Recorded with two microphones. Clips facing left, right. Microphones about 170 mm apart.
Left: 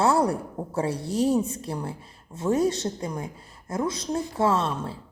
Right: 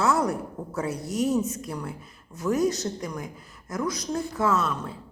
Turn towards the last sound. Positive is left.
turn(degrees=30)  # may be behind; listen again after turning